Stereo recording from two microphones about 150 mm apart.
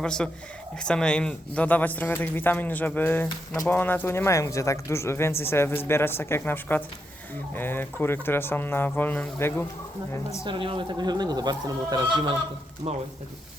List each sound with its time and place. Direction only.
0.0 s speech: 5° left (ahead or behind)
10.4 s speech: 35° right (ahead or behind)
12.8 s speech: 40° right (ahead or behind)